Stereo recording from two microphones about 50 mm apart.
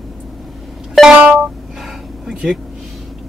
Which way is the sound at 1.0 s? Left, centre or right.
Centre.